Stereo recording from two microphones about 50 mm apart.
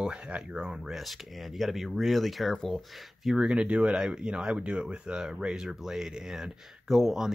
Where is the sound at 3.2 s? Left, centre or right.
Centre.